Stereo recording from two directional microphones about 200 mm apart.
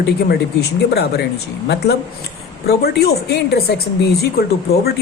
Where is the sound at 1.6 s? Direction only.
55° left (ahead or behind).